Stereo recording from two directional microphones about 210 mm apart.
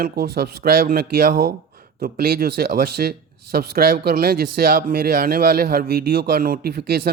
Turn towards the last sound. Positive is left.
turn(degrees=-50)  # may be behind; listen again after turning